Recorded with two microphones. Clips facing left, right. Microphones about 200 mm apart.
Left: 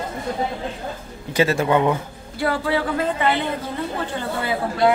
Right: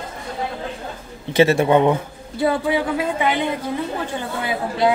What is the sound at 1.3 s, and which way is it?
A man's voice, 25° right (ahead or behind).